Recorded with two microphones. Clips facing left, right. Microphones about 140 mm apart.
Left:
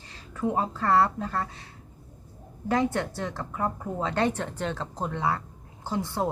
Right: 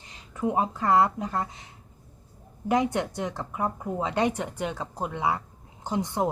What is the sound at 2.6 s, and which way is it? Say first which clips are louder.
Speech: right 1 dB; 15° right (ahead or behind).